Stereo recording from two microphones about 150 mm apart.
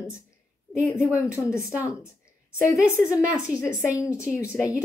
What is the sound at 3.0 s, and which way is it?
Speech, 5° right (ahead or behind).